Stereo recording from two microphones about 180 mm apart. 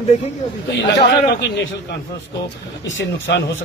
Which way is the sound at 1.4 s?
75° left (ahead or behind).